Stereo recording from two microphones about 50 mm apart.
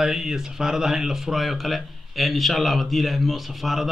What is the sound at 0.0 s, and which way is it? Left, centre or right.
A man's voice, centre.